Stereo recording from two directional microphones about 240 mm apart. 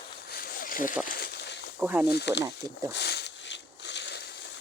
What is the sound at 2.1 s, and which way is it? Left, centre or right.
Speech, left.